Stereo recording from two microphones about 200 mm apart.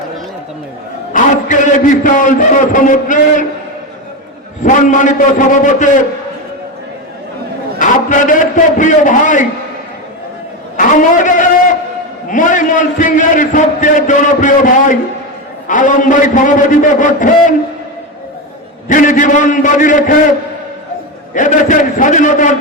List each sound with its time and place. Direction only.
1.1 s a man's voice: 40° left (ahead or behind)
4.6 s a man's voice: 40° left (ahead or behind)
7.8 s a man's voice: 40° left (ahead or behind)
10.8 s a man's voice: 40° left (ahead or behind)
18.9 s a man's voice: 40° left (ahead or behind)
21.3 s a man's voice: 40° left (ahead or behind)